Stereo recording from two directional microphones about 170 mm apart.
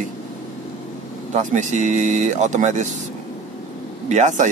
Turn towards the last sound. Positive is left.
turn(degrees=-45)  # may be behind; listen again after turning